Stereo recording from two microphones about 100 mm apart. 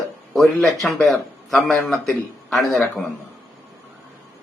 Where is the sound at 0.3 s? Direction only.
Centre (ahead or behind).